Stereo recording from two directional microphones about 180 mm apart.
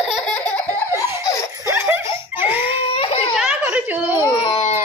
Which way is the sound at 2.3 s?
10° right (ahead or behind).